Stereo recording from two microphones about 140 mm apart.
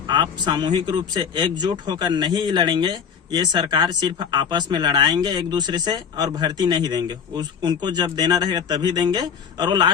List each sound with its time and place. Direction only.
0.1 s a man's voice: 35° right (ahead or behind)